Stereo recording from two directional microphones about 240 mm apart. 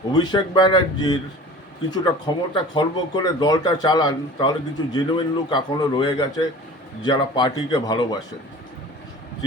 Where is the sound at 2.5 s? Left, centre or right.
Centre.